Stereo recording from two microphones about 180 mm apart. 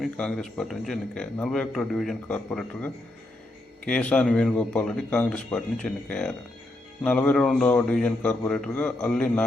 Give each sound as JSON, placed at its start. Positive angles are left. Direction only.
{"t": 0.0, "sound": "a man's voice", "side_deg": 5}